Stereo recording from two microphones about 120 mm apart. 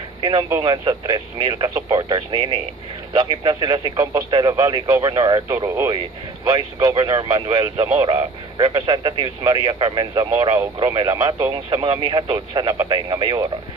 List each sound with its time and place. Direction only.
0.2 s speech: 40° right (ahead or behind)
3.9 s speech: 30° right (ahead or behind)